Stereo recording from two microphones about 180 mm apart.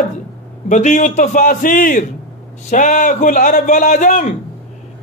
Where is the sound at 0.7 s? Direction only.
45° left (ahead or behind).